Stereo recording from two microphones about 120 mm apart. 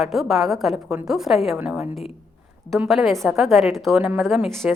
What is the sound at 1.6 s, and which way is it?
Speech, 10° right (ahead or behind).